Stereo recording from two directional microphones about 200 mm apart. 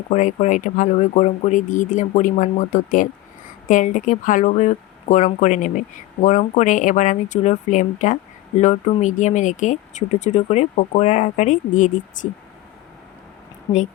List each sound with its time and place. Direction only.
0.1 s speech: 35° left (ahead or behind)